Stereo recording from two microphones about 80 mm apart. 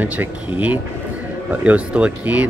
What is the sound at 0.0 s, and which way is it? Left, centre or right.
Speech, centre.